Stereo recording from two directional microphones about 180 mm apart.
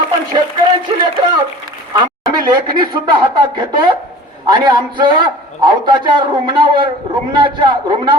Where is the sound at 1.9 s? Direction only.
20° right (ahead or behind).